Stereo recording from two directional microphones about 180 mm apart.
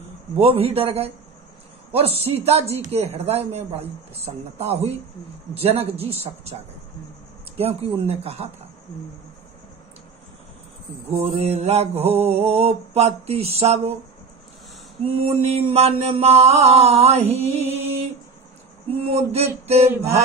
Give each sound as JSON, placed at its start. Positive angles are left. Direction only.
{"t": 0.4, "sound": "mantra", "side_deg": -30}
{"t": 11.2, "sound": "mantra", "side_deg": -35}
{"t": 15.0, "sound": "mantra", "side_deg": -30}